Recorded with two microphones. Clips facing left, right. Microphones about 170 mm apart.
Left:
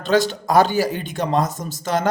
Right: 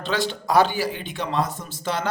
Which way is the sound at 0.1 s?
45° left (ahead or behind).